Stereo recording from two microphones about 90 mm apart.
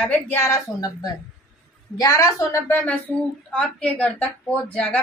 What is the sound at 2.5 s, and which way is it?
Speech, 25° left (ahead or behind).